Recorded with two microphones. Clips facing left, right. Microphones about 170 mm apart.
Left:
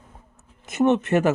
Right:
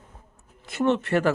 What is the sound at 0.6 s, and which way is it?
Speech, 20° left (ahead or behind).